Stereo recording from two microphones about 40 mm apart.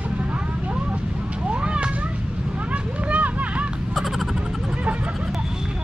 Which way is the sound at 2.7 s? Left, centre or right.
Right.